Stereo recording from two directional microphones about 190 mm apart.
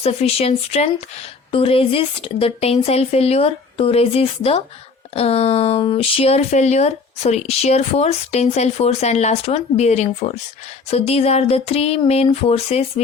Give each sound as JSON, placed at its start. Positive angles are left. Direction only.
{"t": 0.0, "sound": "speech", "side_deg": 35}